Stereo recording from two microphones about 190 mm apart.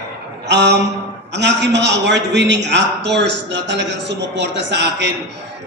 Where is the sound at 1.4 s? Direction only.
65° right (ahead or behind).